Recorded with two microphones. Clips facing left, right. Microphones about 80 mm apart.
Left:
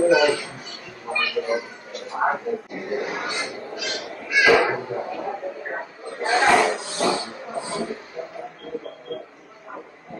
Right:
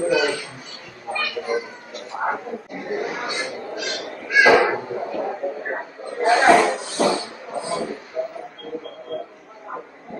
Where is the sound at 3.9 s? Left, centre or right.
Centre.